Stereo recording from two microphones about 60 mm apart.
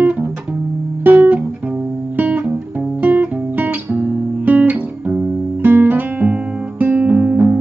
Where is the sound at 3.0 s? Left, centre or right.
Right.